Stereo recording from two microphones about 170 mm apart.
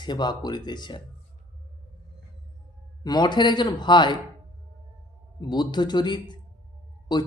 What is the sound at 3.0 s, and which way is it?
Speech, 25° left (ahead or behind).